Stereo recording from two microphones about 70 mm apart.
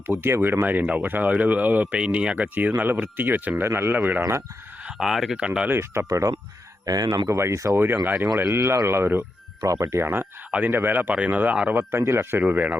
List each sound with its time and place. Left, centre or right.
0.1 s speech: right
3.6 s speech: right
4.9 s speech: centre
5.4 s speech: centre
5.6 s speech: right
6.1 s speech: right
6.8 s speech: right
7.3 s speech: right
8.0 s speech: right
8.4 s speech: right
9.6 s speech: right
11.9 s speech: right
12.5 s speech: right